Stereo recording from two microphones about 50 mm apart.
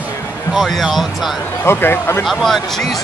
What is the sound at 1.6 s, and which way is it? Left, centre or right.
Speech, left.